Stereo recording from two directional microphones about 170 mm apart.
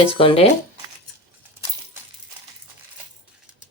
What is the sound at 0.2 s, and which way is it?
Speech, 30° left (ahead or behind).